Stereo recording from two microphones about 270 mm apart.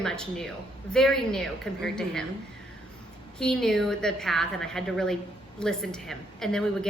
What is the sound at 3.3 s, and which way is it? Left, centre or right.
A woman's voice, centre.